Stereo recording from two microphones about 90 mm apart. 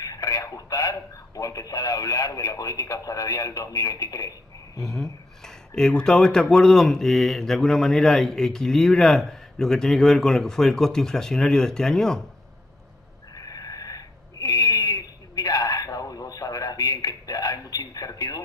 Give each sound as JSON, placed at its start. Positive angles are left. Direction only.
{"t": 0.0, "sound": "a man's voice", "side_deg": 40}
{"t": 4.8, "sound": "a man's voice", "side_deg": 5}
{"t": 13.3, "sound": "a sound", "side_deg": 45}